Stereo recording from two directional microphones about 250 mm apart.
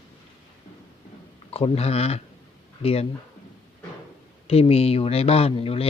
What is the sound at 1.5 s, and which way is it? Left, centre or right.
Speech, left.